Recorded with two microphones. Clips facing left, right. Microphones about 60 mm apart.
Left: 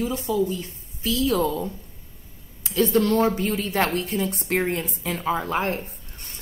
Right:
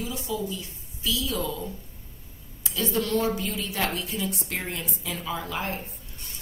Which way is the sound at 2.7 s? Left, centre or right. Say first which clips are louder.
Left 6 dB; left.